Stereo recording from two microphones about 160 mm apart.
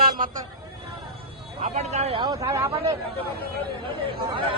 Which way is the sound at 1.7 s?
40° right (ahead or behind).